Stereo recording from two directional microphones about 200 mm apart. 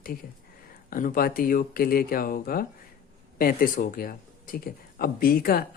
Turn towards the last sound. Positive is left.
turn(degrees=50)  # may be behind; listen again after turning